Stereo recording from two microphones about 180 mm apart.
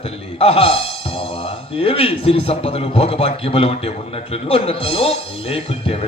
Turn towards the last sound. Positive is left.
turn(degrees=35)  # may be behind; listen again after turning